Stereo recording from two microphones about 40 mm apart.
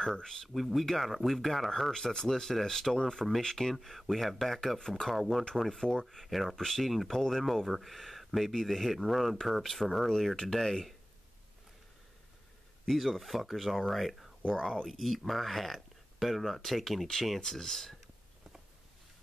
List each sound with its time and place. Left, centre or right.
0.1 s speech: centre
0.5 s speech: centre
12.8 s speech: centre
14.5 s speech: centre
14.9 s speech: centre